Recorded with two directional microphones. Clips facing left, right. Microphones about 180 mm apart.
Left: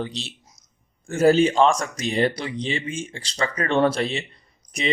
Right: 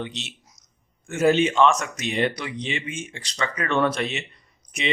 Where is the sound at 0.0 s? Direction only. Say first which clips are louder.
Left 3 dB; 35° left (ahead or behind).